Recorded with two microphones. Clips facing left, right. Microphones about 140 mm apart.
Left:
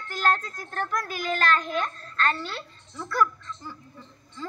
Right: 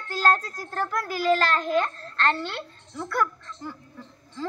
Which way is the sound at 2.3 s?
65° right (ahead or behind).